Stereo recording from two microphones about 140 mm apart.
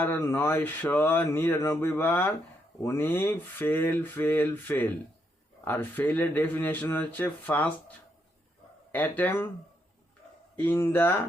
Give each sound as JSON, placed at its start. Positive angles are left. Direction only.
{"t": 0.0, "sound": "speech", "side_deg": 15}
{"t": 10.6, "sound": "speech", "side_deg": 15}